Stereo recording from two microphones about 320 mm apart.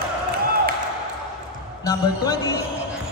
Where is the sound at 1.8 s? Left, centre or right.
Centre.